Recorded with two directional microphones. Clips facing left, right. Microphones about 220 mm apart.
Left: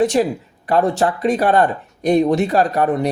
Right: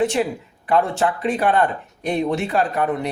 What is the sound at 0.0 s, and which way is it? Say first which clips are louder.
Speech: left 4 dB; 40° left (ahead or behind).